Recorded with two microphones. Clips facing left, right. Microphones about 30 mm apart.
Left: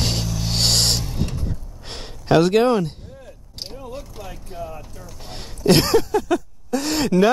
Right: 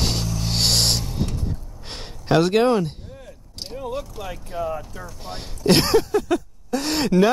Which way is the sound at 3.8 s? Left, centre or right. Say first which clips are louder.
Right 8 dB; right.